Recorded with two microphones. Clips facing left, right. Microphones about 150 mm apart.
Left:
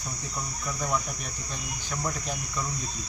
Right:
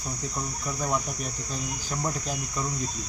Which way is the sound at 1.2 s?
35° right (ahead or behind).